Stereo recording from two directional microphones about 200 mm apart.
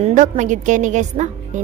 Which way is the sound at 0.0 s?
40° right (ahead or behind).